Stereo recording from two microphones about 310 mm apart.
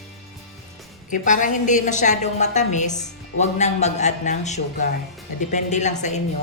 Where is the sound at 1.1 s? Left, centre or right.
Left.